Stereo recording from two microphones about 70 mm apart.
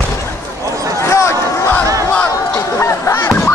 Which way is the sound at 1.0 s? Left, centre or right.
Left.